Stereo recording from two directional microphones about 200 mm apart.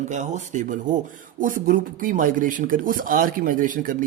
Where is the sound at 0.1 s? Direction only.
35° right (ahead or behind).